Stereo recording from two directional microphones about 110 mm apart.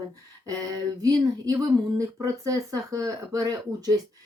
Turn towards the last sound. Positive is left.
turn(degrees=-35)  # may be behind; listen again after turning